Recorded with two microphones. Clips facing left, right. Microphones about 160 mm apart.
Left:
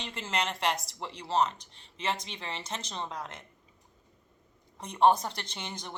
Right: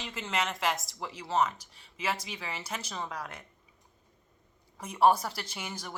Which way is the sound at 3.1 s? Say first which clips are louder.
Even; 25° left (ahead or behind).